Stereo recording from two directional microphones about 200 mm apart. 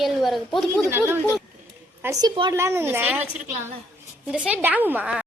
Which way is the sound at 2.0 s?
15° right (ahead or behind).